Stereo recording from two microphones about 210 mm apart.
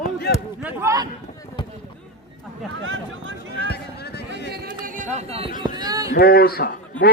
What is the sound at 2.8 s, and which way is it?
Speech, 65° right (ahead or behind).